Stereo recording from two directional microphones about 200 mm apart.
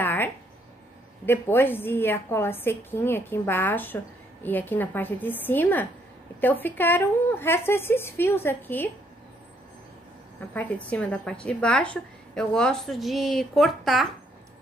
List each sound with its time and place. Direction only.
0.0 s a sound: 10° left (ahead or behind)
1.2 s a woman's voice: 10° left (ahead or behind)
10.5 s a woman's voice: 10° left (ahead or behind)